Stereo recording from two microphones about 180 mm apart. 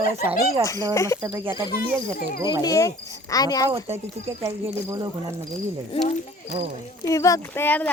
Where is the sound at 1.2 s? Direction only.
15° right (ahead or behind).